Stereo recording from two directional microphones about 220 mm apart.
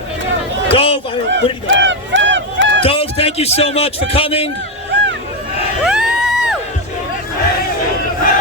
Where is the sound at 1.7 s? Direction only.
55° right (ahead or behind).